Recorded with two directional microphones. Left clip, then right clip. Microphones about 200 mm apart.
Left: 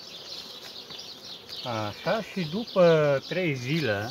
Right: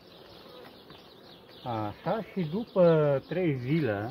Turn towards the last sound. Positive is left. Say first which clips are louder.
# left 2 dB
turn(degrees=10)  # may be behind; listen again after turning